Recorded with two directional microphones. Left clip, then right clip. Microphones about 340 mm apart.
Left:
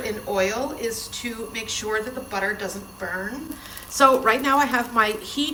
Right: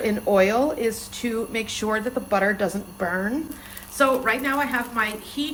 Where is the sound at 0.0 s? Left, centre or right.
Centre.